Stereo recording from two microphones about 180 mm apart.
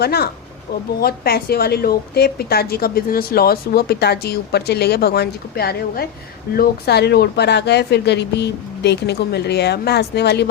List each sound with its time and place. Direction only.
0.0 s a woman's voice: 60° left (ahead or behind)